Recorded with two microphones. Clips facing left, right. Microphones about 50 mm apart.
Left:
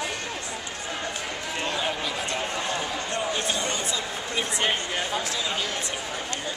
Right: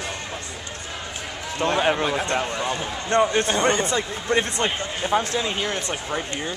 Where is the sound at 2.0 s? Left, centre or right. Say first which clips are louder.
Right 6 dB; right.